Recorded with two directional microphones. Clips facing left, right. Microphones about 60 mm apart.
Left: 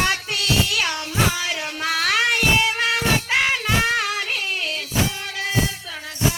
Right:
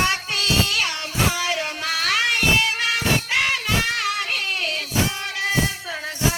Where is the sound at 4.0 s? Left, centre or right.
Right.